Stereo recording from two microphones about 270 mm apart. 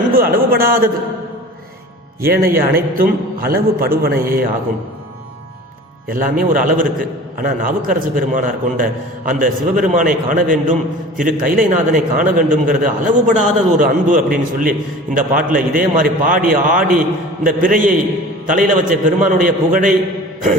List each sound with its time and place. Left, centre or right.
0.1 s a man's voice: right
2.2 s a man's voice: right
6.1 s a man's voice: right